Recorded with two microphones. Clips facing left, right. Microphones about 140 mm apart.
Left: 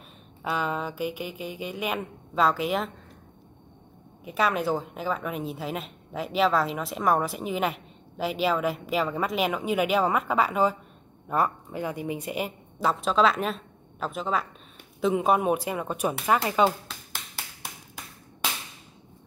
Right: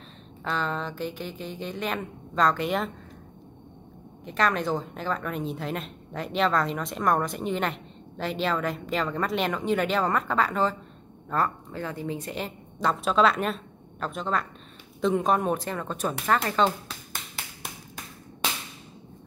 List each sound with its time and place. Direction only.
0.4 s a woman's voice: 10° left (ahead or behind)
4.2 s a woman's voice: 10° left (ahead or behind)
15.0 s a sound: 5° left (ahead or behind)